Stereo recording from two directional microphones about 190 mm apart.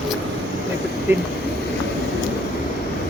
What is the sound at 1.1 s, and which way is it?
Speech, 10° right (ahead or behind).